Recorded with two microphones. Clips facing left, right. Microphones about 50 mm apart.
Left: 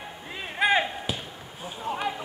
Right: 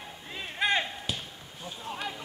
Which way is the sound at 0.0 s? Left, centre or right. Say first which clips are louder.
Left 3 dB; centre.